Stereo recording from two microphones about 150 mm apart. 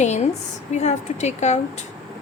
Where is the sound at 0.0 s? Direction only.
50° left (ahead or behind).